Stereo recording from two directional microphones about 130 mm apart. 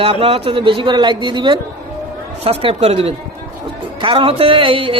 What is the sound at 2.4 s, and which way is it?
A man's voice, 50° right (ahead or behind).